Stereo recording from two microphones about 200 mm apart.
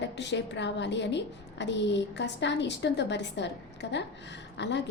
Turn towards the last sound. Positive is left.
turn(degrees=60)  # may be behind; listen again after turning